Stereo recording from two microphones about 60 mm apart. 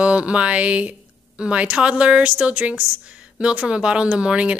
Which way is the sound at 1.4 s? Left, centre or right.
Centre.